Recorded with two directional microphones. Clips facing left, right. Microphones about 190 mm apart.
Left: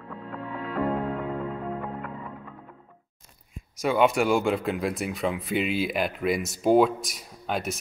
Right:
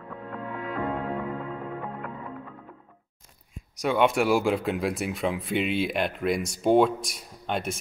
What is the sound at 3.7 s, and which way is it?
Speech, centre (ahead or behind).